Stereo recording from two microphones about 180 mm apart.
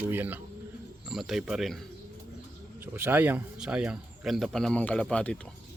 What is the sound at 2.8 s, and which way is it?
Speech, 10° right (ahead or behind).